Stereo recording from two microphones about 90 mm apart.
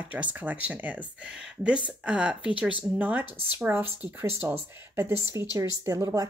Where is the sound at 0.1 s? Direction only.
15° right (ahead or behind).